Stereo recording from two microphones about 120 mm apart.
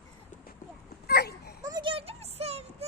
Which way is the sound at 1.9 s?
55° right (ahead or behind).